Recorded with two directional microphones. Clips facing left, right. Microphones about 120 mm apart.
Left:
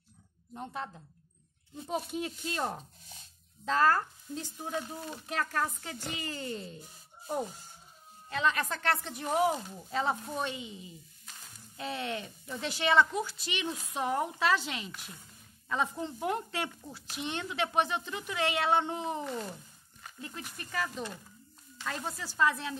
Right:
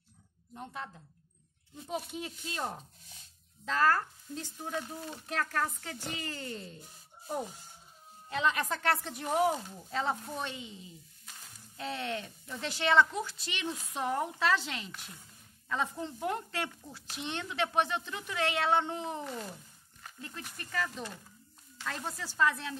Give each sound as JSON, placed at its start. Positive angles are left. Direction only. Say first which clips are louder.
{"t": 0.6, "sound": "a woman's voice", "louder": "left 3 dB", "side_deg": 30}
{"t": 2.2, "sound": "speech", "louder": "left 3 dB", "side_deg": 60}
{"t": 3.6, "sound": "speech", "louder": "left 2 dB", "side_deg": 25}
{"t": 8.3, "sound": "a woman's voice", "louder": "even", "side_deg": -15}